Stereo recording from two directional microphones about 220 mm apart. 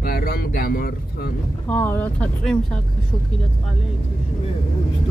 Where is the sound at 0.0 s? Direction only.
40° left (ahead or behind).